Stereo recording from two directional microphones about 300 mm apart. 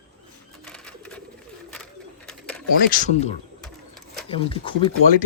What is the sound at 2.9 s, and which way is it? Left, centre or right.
Speech, left.